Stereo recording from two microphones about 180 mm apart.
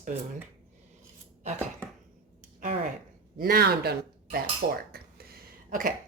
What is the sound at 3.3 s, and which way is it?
A child's voice, 55° right (ahead or behind).